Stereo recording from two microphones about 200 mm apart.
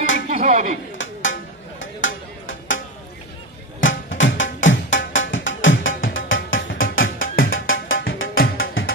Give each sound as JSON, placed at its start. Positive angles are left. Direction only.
{"t": 0.3, "sound": "a sound", "side_deg": -35}
{"t": 0.9, "sound": "music", "side_deg": 70}
{"t": 3.8, "sound": "music", "side_deg": 70}